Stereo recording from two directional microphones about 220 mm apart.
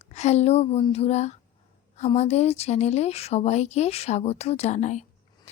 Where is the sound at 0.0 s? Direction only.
30° left (ahead or behind).